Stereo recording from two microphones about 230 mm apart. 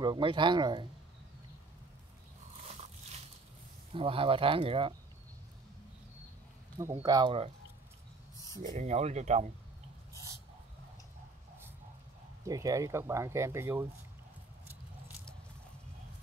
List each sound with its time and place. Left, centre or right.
0.0 s speech: right
2.6 s a sound: right
3.9 s speech: right
6.8 s speech: centre
8.7 s speech: right
12.4 s speech: centre